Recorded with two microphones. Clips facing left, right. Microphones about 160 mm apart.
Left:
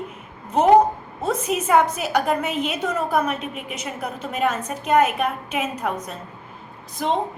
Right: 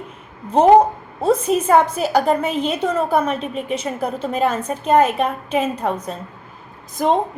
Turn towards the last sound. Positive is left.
turn(degrees=-45)  # may be behind; listen again after turning